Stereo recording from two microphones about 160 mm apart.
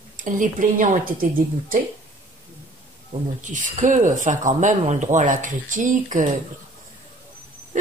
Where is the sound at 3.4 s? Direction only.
50° right (ahead or behind).